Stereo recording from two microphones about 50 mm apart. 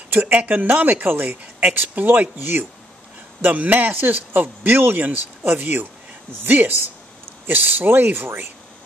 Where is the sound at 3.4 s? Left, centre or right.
Right.